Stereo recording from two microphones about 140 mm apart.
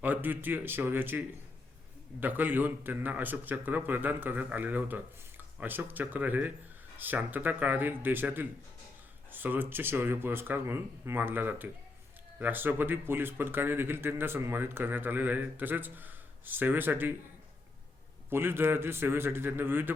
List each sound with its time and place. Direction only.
0.0 s speech: 15° right (ahead or behind)
2.2 s speech: 15° right (ahead or behind)
18.3 s speech: 15° right (ahead or behind)